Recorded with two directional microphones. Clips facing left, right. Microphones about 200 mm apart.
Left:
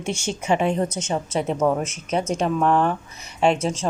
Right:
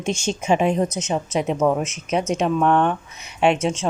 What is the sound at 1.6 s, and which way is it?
Speech, centre (ahead or behind).